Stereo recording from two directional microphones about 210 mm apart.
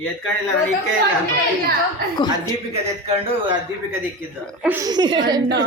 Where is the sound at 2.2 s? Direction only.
20° left (ahead or behind).